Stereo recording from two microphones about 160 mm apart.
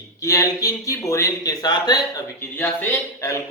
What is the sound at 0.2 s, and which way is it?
Speech, 20° left (ahead or behind).